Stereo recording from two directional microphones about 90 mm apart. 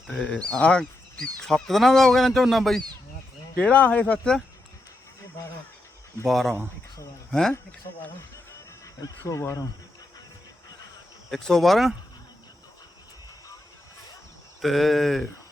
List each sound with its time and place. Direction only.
0.1 s speech: 15° left (ahead or behind)
3.5 s speech: 15° left (ahead or behind)
6.2 s speech: centre (ahead or behind)
9.0 s speech: 35° left (ahead or behind)
11.3 s speech: 5° left (ahead or behind)
14.6 s speech: centre (ahead or behind)